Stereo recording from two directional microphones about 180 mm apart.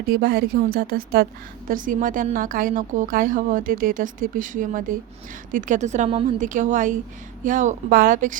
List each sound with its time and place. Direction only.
0.1 s a woman's voice: 60° right (ahead or behind); by 6.2 s 35° right (ahead or behind)
6.4 s a woman's voice: 45° right (ahead or behind)